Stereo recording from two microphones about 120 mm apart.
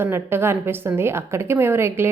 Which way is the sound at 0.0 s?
20° right (ahead or behind).